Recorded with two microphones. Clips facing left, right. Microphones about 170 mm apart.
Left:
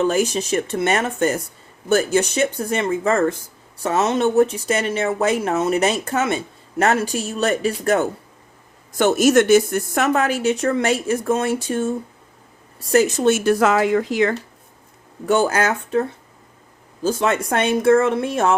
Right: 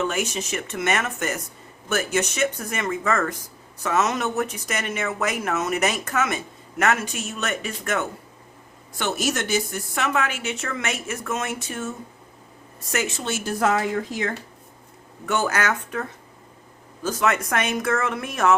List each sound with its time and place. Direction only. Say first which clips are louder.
0.0 s speech: left 7 dB; 35° left (ahead or behind)
9.0 s speech: left 11 dB; 45° left (ahead or behind)
13.4 s speech: left 6 dB; 85° left
15.3 s speech: left 6 dB; 30° left (ahead or behind)